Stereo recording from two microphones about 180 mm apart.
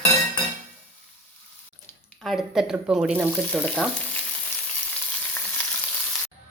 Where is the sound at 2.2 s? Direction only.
Centre (ahead or behind).